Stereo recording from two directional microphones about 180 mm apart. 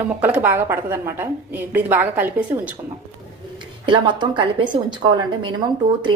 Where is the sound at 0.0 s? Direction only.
10° right (ahead or behind).